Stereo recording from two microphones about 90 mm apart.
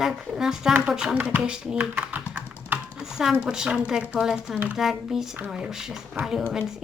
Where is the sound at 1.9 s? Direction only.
20° right (ahead or behind).